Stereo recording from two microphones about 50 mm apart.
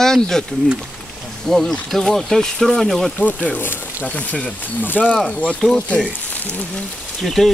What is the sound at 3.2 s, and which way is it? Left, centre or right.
Speech, left.